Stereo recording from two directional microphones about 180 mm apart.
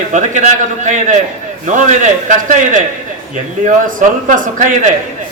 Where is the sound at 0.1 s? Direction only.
40° right (ahead or behind).